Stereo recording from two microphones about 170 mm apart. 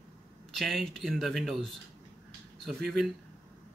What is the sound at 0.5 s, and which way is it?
Speech, centre (ahead or behind).